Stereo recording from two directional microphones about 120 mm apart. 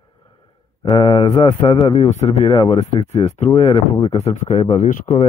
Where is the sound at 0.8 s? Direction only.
45° left (ahead or behind).